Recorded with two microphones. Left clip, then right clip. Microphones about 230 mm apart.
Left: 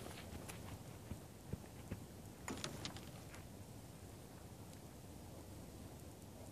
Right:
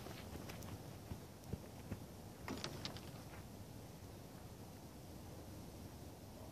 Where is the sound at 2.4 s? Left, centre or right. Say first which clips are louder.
Even; left.